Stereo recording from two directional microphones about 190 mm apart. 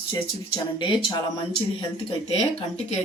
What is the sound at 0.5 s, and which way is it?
Speech, 25° left (ahead or behind).